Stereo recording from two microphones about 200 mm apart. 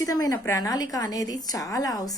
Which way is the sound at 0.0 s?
15° left (ahead or behind).